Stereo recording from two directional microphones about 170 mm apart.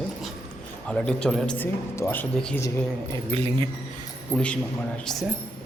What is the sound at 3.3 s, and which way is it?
Speech, 35° right (ahead or behind).